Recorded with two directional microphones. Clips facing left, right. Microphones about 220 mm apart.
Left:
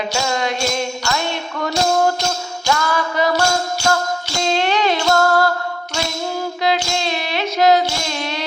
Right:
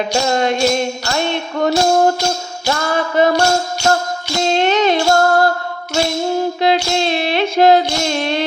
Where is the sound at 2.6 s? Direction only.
45° right (ahead or behind).